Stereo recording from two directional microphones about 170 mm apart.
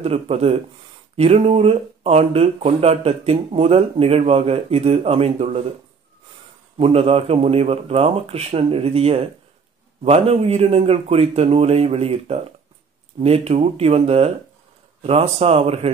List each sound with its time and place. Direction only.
0.0 s speech: 35° right (ahead or behind)
6.8 s speech: 35° right (ahead or behind)